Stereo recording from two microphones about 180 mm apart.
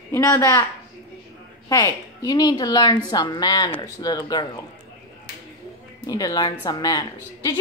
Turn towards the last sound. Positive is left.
turn(degrees=20)  # may be behind; listen again after turning